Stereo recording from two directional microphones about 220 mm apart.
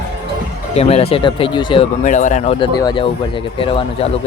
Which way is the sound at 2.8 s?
20° left (ahead or behind).